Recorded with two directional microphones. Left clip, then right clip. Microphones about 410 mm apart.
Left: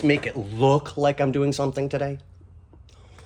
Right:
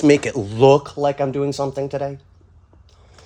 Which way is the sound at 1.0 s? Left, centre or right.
Centre.